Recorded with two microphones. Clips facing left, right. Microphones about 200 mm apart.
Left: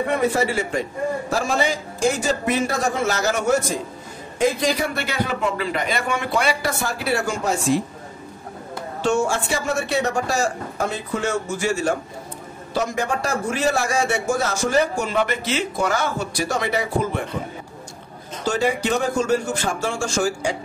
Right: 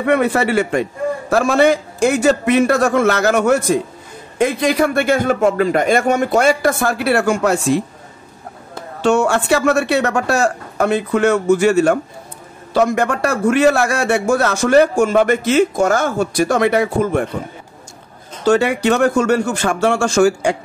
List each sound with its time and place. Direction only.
0.0 s a man's voice: 65° right (ahead or behind)
9.0 s speech: 70° right (ahead or behind)
15.0 s a man's voice: 50° right (ahead or behind)
18.5 s speech: 65° right (ahead or behind)